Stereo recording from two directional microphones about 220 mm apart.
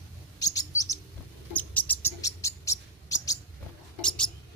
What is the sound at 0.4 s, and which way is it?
Chirp, 15° left (ahead or behind).